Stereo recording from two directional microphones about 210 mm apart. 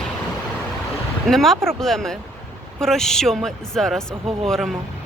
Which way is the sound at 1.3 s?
Centre (ahead or behind).